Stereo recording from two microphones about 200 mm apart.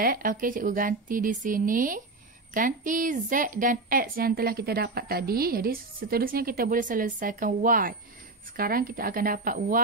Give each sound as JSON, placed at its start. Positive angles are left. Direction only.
{"t": 0.0, "sound": "a woman's voice", "side_deg": -45}